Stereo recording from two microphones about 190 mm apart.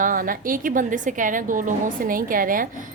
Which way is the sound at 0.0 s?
45° right (ahead or behind).